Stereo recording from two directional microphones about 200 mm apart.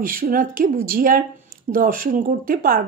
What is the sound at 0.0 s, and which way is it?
Speech, 45° right (ahead or behind).